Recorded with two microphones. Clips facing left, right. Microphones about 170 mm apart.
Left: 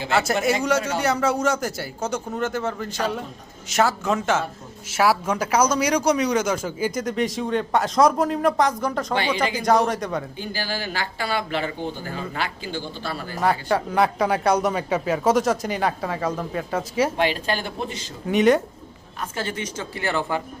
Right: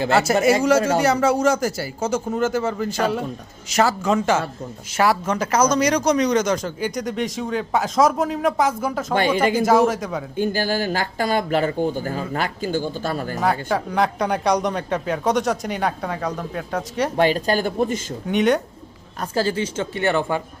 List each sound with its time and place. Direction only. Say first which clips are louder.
0.1 s speech: right 3 dB; centre (ahead or behind)
9.1 s speech: right 8 dB; 50° right (ahead or behind)
9.6 s speech: right 3 dB; 5° right (ahead or behind)
10.3 s speech: right 8 dB; 50° right (ahead or behind)
13.4 s speech: left 1 dB; centre (ahead or behind)
17.2 s speech: right 5 dB; 40° right (ahead or behind)
18.3 s speech: left 1 dB; centre (ahead or behind)
19.3 s speech: right 9 dB; 30° right (ahead or behind)